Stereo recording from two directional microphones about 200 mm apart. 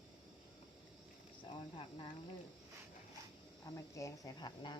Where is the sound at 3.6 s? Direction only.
15° left (ahead or behind).